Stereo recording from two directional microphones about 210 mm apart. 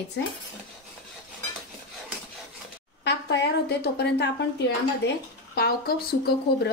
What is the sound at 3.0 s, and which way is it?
A woman's voice, 55° left (ahead or behind).